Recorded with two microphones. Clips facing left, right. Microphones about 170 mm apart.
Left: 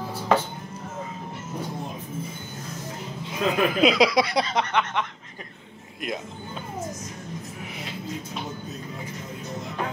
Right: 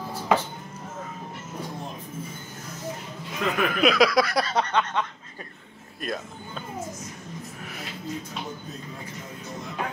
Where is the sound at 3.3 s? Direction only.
20° left (ahead or behind).